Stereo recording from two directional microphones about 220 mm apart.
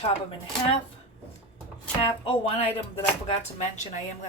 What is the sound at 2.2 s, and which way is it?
Speech, 25° left (ahead or behind).